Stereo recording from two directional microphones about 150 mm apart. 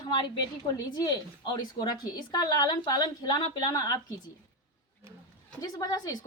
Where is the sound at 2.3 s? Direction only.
25° left (ahead or behind).